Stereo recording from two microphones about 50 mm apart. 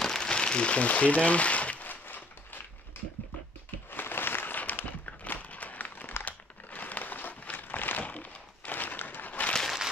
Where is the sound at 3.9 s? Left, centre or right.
Left.